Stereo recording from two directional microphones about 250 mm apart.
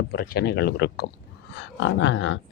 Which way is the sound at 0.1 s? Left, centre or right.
Left.